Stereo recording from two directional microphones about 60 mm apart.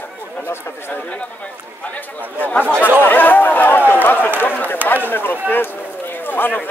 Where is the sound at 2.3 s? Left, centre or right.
Left.